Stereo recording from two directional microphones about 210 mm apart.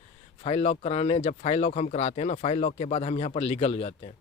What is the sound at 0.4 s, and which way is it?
Speech, 30° left (ahead or behind).